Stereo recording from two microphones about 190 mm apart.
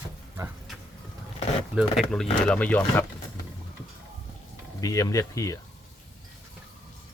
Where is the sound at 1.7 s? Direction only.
Centre (ahead or behind).